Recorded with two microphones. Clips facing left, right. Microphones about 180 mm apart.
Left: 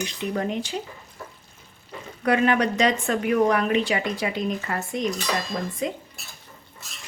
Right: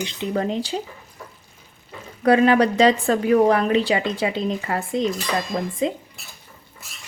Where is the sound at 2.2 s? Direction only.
35° right (ahead or behind).